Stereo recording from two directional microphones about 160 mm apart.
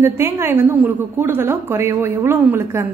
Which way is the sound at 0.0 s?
15° right (ahead or behind).